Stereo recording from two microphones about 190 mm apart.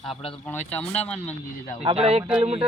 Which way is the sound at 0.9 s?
35° left (ahead or behind).